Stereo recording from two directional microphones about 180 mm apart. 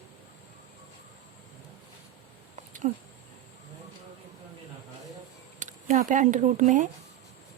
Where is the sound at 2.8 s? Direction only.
45° right (ahead or behind).